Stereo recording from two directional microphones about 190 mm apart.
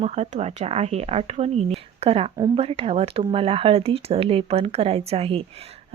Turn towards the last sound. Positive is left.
turn(degrees=-30)  # may be behind; listen again after turning